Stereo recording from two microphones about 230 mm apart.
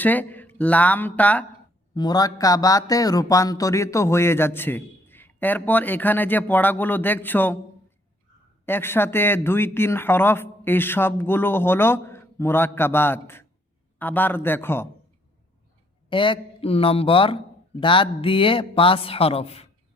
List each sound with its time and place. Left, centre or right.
0.0 s speech: centre
2.0 s speech: centre
8.6 s speech: centre
16.0 s a man's voice: left